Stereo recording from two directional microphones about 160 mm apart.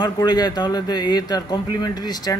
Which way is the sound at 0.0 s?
25° left (ahead or behind).